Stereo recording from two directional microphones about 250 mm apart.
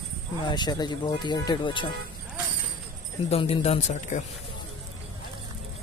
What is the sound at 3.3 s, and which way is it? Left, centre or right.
Speech, left.